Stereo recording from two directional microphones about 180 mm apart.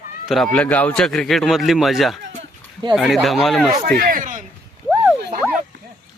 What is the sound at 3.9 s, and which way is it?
Speech, 50° right (ahead or behind).